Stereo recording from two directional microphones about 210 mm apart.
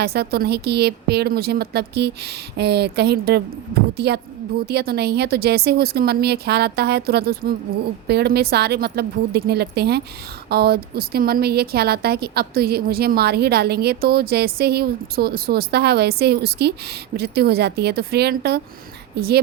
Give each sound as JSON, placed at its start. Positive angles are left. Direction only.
{"t": 0.0, "sound": "a woman's voice", "side_deg": -50}